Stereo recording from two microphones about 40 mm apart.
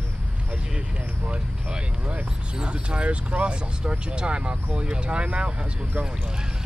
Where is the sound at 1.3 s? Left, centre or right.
Right.